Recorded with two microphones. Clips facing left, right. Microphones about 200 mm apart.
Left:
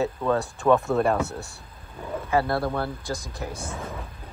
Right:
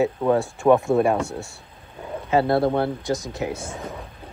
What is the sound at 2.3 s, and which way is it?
Speech, 25° right (ahead or behind).